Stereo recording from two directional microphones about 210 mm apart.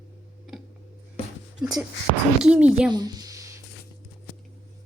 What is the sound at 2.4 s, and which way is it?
Speech, 5° right (ahead or behind).